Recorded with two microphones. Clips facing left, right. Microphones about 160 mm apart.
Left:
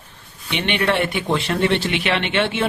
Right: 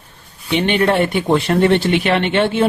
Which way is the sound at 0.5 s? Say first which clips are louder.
Right 5 dB; 35° right (ahead or behind).